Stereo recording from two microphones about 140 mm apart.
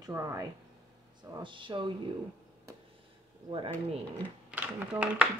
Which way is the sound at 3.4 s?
35° right (ahead or behind).